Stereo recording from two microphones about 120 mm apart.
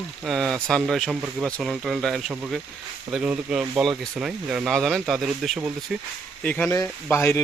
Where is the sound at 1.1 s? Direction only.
10° right (ahead or behind).